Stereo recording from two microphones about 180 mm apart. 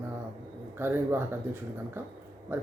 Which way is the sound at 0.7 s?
10° right (ahead or behind).